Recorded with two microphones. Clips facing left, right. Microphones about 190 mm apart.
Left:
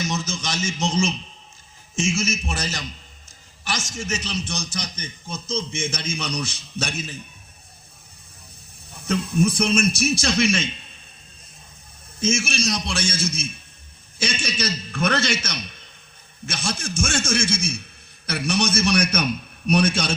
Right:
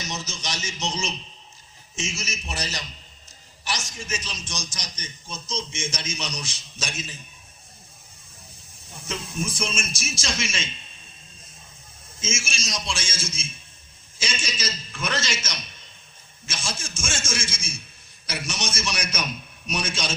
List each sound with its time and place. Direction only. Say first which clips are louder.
0.0 s a sound: left 7 dB; 50° left (ahead or behind)
2.0 s a man's voice: left 10 dB; 50° left (ahead or behind)
3.2 s a sound: left 2 dB; 50° left (ahead or behind)
4.0 s a man's voice: left 6 dB; 65° left (ahead or behind)
9.0 s a man's voice: left 10 dB; 60° left (ahead or behind)
12.2 s a man's voice: left 9 dB; 60° left (ahead or behind)